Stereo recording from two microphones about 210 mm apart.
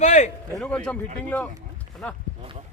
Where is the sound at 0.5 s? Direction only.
5° left (ahead or behind).